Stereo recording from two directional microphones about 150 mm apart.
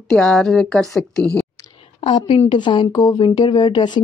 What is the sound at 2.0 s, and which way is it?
A woman's voice, 35° left (ahead or behind).